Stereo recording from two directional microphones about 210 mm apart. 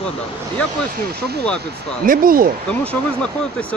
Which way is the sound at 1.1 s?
50° right (ahead or behind).